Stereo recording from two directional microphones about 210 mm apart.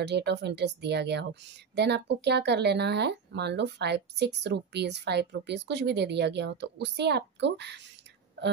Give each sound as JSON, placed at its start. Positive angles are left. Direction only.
{"t": 0.0, "sound": "speech", "side_deg": -55}